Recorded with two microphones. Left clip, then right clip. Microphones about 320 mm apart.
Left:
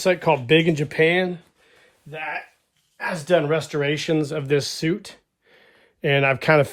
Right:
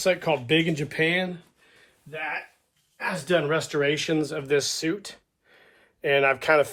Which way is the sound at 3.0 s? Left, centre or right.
Centre.